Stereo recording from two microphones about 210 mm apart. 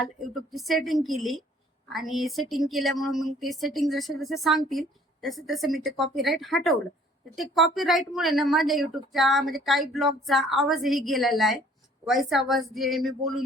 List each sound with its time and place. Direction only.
0.5 s speech: centre (ahead or behind)